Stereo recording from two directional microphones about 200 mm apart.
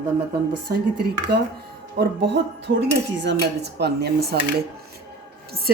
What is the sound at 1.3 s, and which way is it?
A woman's voice, 50° right (ahead or behind).